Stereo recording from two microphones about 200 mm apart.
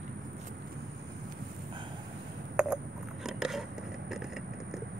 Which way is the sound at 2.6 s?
5° right (ahead or behind).